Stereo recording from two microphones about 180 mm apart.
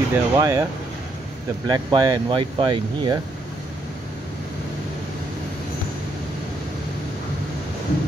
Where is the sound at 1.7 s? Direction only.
20° right (ahead or behind).